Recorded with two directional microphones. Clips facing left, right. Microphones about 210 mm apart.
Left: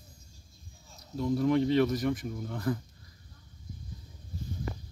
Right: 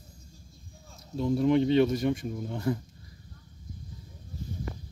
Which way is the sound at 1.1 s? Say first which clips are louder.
Right 2 dB; 25° right (ahead or behind).